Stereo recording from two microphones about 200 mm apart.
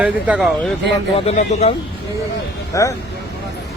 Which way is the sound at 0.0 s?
5° right (ahead or behind).